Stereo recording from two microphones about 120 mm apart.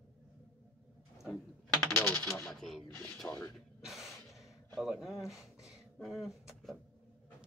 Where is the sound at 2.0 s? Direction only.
20° left (ahead or behind).